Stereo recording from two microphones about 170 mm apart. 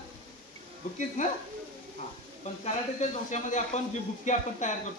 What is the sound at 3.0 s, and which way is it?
Speech, 45° left (ahead or behind).